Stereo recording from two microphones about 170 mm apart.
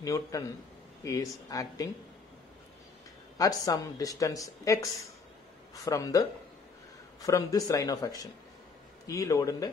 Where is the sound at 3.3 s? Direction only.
20° left (ahead or behind).